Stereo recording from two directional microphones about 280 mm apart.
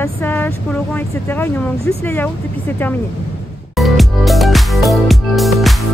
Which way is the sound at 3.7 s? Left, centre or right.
Centre.